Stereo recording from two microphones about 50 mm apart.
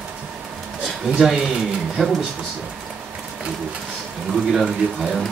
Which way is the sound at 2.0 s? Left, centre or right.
Centre.